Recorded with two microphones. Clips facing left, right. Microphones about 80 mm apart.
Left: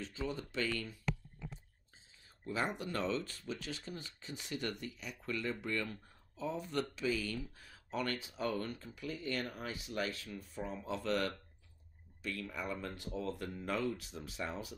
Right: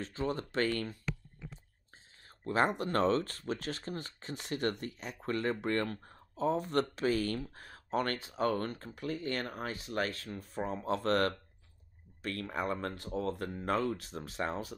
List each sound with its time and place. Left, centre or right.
0.0 s speech: right
2.2 s a sound: right
2.8 s speech: right